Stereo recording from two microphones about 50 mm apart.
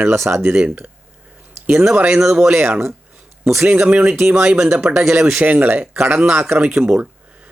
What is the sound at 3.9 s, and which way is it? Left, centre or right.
Speech, right.